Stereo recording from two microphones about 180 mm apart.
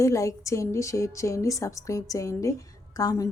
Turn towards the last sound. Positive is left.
turn(degrees=20)  # may be behind; listen again after turning